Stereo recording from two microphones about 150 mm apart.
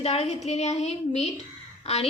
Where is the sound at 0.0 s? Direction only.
45° left (ahead or behind).